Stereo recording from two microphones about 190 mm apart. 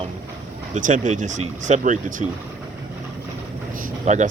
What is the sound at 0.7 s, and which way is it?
Speech, 40° right (ahead or behind).